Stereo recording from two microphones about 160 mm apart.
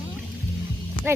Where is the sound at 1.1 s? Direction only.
15° right (ahead or behind).